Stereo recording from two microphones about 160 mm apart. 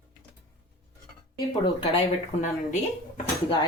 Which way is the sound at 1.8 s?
35° left (ahead or behind).